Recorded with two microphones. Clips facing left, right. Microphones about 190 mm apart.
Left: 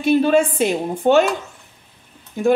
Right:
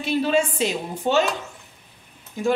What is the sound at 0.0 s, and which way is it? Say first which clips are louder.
A woman's voice: left 6 dB; 55° left (ahead or behind).